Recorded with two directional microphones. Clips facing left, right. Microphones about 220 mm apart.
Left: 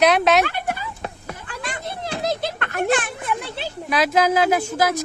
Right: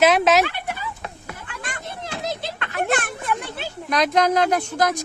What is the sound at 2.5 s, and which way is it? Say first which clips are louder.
Children playing: left 2 dB; 50° left (ahead or behind).